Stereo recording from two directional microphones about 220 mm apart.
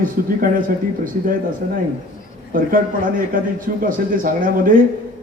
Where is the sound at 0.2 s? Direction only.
40° right (ahead or behind).